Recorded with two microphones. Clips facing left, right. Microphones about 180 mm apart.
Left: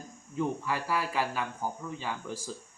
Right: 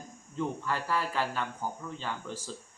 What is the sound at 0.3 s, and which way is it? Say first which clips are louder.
Speech: left 2 dB; 10° left (ahead or behind).